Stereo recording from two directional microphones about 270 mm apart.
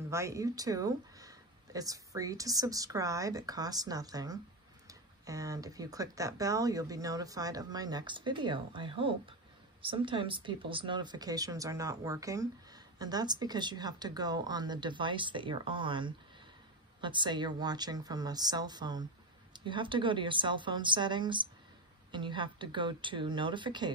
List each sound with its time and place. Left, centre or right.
0.1 s speech: centre